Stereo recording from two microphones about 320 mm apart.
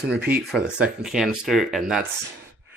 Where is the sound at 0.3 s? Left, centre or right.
Centre.